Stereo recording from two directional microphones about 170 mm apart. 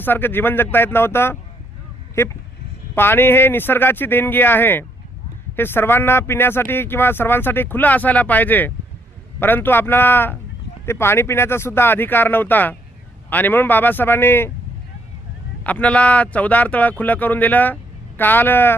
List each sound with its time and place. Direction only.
0.0 s speech: 10° left (ahead or behind)
15.6 s speech: 10° left (ahead or behind)